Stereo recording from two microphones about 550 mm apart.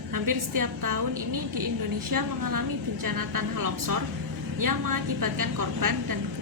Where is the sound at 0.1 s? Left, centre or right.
Right.